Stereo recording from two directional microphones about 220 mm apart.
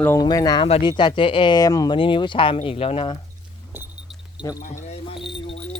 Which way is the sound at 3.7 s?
10° right (ahead or behind).